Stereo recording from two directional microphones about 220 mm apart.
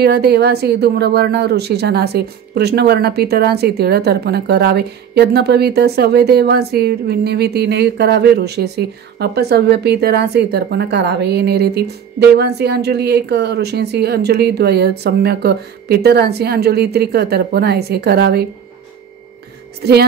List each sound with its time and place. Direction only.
0.0 s speech: 45° right (ahead or behind)
19.8 s speech: 45° right (ahead or behind)